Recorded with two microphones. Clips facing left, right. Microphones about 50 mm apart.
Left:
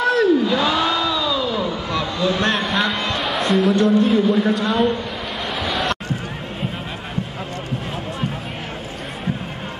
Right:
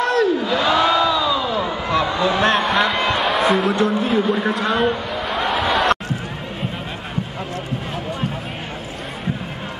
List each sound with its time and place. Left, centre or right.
0.0 s crowd: centre
2.1 s a man's voice: right
2.4 s a man's voice: centre
4.3 s a man's voice: centre
4.6 s a man's voice: centre
5.4 s a sound: centre